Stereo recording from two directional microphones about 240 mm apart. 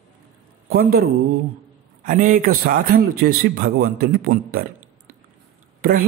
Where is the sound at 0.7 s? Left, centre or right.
Right.